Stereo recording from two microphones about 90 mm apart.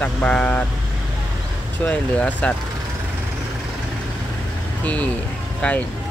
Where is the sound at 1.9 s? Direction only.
15° left (ahead or behind).